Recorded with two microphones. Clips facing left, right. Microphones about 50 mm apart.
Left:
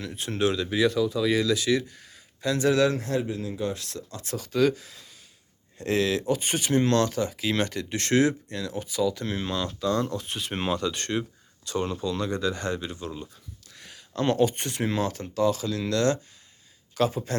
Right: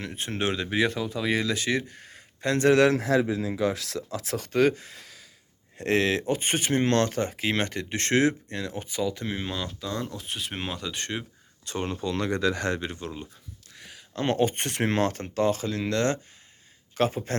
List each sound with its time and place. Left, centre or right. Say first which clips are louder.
0.0 s speech: left 3 dB; right
2.8 s speech: right 3 dB; right; by 11.3 s centre
11.6 s speech: left 2 dB; right
12.0 s speech: right 1 dB; right
12.8 s speech: even; right
13.7 s a sound: right 1 dB; centre
14.2 s speech: left 2 dB; right
14.5 s speech: right 2 dB; right